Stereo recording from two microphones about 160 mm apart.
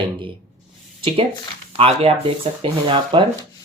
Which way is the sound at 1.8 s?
40° right (ahead or behind).